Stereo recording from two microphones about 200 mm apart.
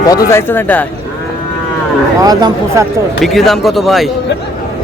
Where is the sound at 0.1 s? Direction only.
15° left (ahead or behind).